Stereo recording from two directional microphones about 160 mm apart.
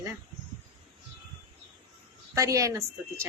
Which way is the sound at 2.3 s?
20° right (ahead or behind).